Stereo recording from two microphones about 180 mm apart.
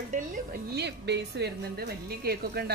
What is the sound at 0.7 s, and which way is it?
Speech, 65° right (ahead or behind).